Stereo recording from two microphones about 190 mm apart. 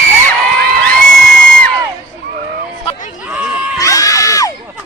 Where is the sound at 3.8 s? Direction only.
15° left (ahead or behind).